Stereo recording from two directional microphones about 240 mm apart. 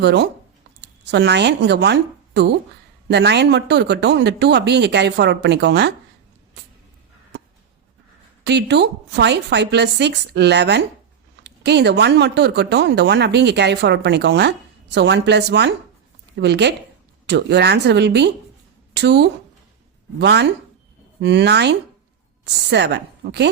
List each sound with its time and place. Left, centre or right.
0.0 s speech: right
8.4 s speech: right